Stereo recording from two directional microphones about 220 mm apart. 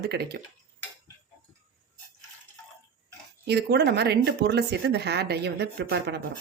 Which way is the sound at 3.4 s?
50° right (ahead or behind).